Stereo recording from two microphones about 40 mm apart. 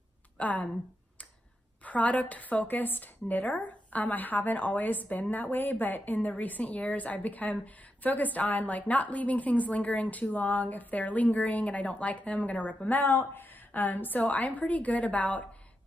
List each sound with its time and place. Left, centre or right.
0.4 s speech: left
1.9 s a woman's voice: left
13.0 s speech: left
13.7 s a woman's voice: left